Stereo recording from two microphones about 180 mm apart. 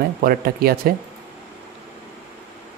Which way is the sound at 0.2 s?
55° right (ahead or behind).